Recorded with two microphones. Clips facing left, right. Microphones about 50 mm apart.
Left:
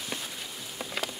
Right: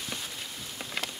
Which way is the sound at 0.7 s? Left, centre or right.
Centre.